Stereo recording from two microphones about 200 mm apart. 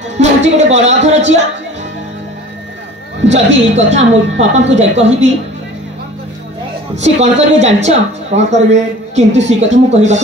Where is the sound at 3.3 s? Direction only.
35° right (ahead or behind).